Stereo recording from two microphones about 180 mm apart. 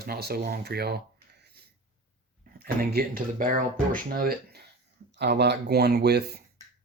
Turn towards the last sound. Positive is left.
turn(degrees=-65)  # may be behind; listen again after turning